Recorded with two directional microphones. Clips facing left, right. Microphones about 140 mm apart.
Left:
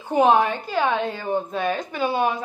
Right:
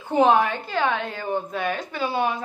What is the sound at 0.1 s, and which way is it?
Speech, 15° left (ahead or behind).